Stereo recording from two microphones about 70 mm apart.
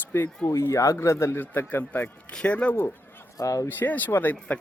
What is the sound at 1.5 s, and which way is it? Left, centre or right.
Speech, left.